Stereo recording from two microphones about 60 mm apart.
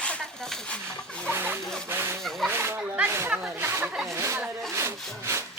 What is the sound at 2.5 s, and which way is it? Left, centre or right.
Snake, right.